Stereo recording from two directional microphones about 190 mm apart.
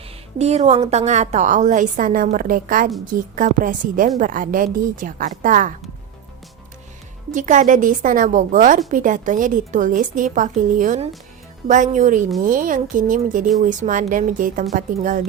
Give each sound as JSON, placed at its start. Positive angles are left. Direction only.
{"t": 0.3, "sound": "a woman's voice", "side_deg": -35}
{"t": 7.3, "sound": "a woman's voice", "side_deg": -40}